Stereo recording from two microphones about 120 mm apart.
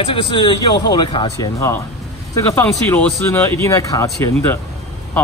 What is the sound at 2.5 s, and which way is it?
Speech, 20° left (ahead or behind).